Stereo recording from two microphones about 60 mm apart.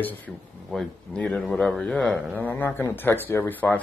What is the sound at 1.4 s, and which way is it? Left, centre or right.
A man's voice, centre.